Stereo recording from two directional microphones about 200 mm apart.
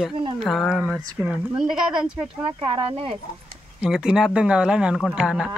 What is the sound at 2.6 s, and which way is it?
Speech, 25° right (ahead or behind).